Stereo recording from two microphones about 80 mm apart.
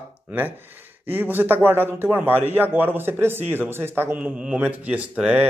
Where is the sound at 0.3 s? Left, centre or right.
Right.